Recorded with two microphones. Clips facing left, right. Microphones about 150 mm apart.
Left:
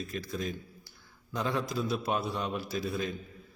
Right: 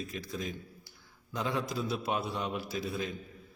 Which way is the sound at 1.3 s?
20° right (ahead or behind).